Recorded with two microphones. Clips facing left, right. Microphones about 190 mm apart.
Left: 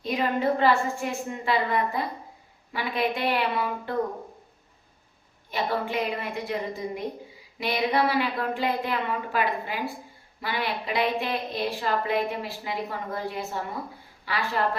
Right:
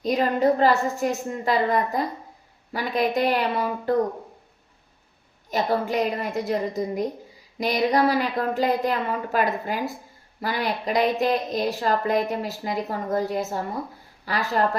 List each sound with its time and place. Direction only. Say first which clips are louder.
0.0 s a woman's voice: right 5 dB; 40° right (ahead or behind)
5.5 s a woman's voice: right 4 dB; 40° right (ahead or behind)